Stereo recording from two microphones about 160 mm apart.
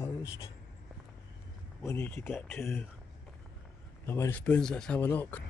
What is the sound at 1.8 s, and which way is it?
Speech, 15° left (ahead or behind).